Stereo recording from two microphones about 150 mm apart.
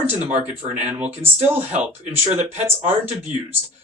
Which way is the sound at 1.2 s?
10° right (ahead or behind).